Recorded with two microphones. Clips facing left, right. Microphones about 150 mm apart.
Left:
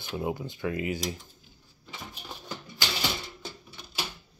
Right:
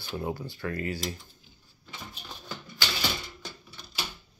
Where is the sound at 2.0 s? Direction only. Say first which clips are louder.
Left 2 dB; 10° left (ahead or behind).